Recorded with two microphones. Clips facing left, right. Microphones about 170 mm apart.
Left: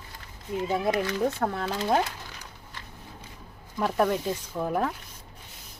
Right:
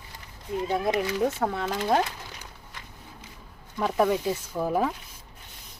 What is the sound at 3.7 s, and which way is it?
Speech, centre (ahead or behind).